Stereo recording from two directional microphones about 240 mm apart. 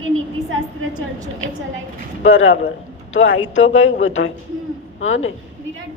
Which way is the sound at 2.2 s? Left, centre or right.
Left.